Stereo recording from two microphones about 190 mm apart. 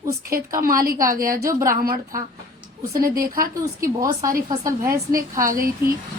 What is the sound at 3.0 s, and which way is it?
Speech, 50° right (ahead or behind).